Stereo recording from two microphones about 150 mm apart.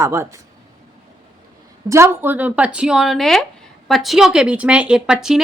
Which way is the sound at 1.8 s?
20° right (ahead or behind).